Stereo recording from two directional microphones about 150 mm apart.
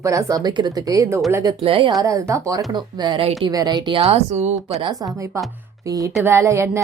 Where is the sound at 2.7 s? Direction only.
30° right (ahead or behind).